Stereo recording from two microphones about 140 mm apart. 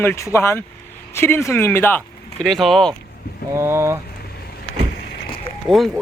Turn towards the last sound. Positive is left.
turn(degrees=0)  # may be behind; listen again after turning